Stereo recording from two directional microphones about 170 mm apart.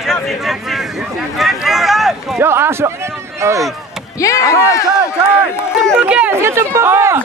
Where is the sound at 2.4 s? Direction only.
15° right (ahead or behind).